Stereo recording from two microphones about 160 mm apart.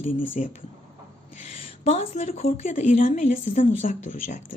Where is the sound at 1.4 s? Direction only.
40° left (ahead or behind).